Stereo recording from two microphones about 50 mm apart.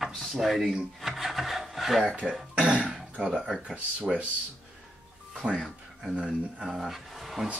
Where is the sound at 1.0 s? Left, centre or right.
Centre.